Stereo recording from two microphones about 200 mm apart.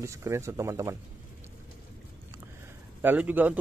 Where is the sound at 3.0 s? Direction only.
10° right (ahead or behind).